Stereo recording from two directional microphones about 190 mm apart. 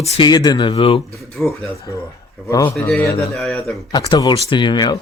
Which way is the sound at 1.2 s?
Centre (ahead or behind).